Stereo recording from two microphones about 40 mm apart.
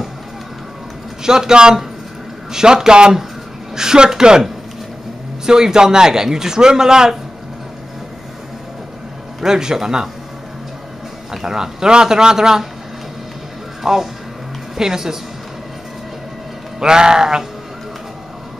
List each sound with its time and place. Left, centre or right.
1.2 s a man's voice: centre
9.4 s a man's voice: centre
11.4 s a man's voice: centre
13.9 s a man's voice: centre
16.8 s a man's voice: centre